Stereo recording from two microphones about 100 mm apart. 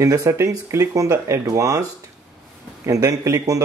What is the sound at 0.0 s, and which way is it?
Speech, 35° right (ahead or behind).